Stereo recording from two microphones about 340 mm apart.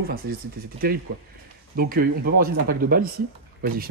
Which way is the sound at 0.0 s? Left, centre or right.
Right.